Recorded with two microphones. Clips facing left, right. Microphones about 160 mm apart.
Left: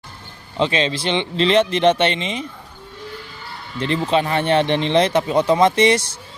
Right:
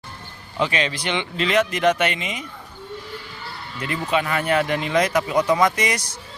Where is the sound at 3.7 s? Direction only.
25° left (ahead or behind).